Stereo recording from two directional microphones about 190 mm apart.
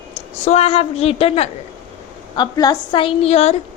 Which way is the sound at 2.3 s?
20° left (ahead or behind).